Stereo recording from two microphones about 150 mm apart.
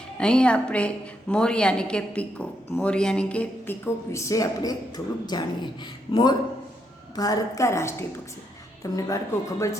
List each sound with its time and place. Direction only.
0.2 s a woman's voice: 5° left (ahead or behind); by 9.7 s 20° left (ahead or behind)